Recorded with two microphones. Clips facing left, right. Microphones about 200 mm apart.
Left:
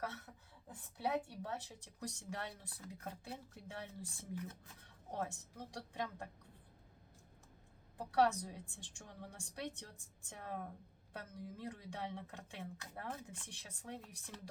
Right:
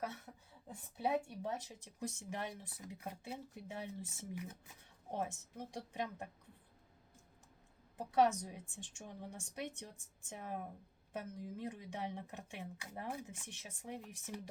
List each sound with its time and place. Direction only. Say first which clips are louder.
0.3 s a woman's voice: right 3 dB; 15° right (ahead or behind)
7.9 s a woman's voice: right 1 dB; 20° right (ahead or behind)